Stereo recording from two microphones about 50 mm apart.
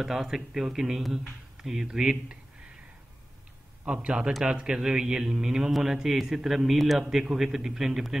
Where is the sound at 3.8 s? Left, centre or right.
Centre.